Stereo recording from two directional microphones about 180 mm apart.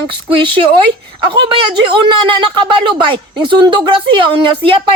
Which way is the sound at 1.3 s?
25° right (ahead or behind).